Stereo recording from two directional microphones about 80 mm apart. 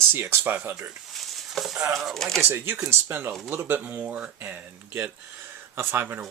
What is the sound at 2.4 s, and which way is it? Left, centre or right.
Speech, right.